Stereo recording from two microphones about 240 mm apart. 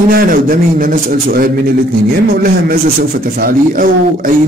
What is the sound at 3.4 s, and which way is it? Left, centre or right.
Speech, right.